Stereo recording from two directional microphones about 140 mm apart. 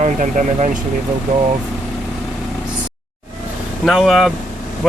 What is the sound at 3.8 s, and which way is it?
Speech, centre (ahead or behind).